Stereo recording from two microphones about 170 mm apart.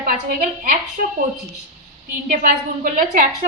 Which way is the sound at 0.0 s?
55° right (ahead or behind).